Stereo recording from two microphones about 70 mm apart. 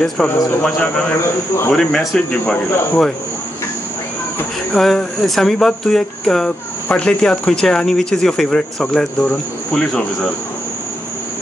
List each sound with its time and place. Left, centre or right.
0.2 s speech: centre
0.6 s speech: centre
4.7 s speech: centre